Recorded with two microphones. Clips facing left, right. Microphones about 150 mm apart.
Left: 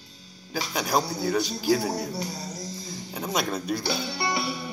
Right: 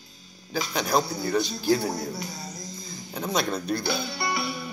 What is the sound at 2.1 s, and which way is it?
Speech, 35° left (ahead or behind).